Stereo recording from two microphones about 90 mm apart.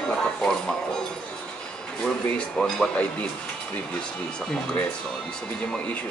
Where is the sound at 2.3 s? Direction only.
10° left (ahead or behind).